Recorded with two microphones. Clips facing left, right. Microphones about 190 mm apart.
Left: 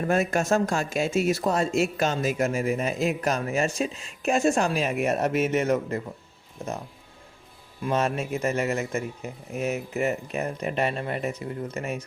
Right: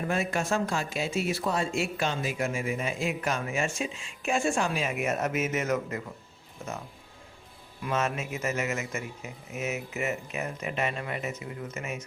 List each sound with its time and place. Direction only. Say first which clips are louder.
0.1 s speech: left 6 dB; 45° left (ahead or behind)
7.9 s speech: left 4 dB; 35° left (ahead or behind)